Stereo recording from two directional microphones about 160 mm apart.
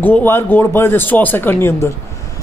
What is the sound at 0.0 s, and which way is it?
A man's voice, 10° left (ahead or behind).